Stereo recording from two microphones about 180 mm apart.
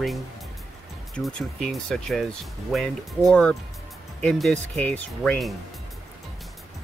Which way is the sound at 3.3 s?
5° left (ahead or behind).